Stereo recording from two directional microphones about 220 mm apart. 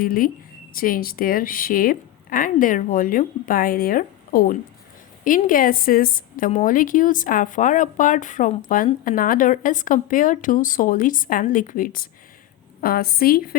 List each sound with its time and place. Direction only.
0.0 s a woman's voice: 40° left (ahead or behind)